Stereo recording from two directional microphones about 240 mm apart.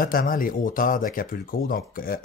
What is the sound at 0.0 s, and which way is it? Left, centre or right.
Speech, left.